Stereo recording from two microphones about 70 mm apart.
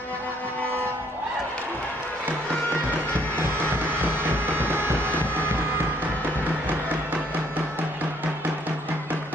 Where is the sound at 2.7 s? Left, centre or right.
Left.